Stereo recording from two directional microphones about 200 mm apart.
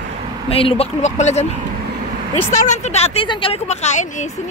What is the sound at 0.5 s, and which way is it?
Speech, 30° left (ahead or behind).